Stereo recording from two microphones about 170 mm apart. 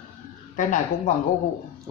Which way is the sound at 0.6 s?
50° left (ahead or behind).